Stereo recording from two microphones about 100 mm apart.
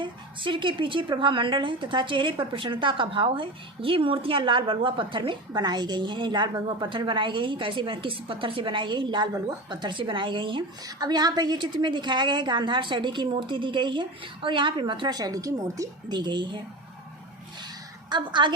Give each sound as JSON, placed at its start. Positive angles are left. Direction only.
{"t": 0.0, "sound": "a woman's voice", "side_deg": -55}
{"t": 9.6, "sound": "a woman's voice", "side_deg": -50}
{"t": 10.8, "sound": "a woman's voice", "side_deg": -40}
{"t": 18.1, "sound": "a woman's voice", "side_deg": -50}